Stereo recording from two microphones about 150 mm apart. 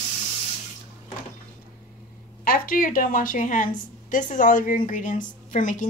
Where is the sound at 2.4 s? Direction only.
75° left (ahead or behind); by 5.9 s 60° left (ahead or behind).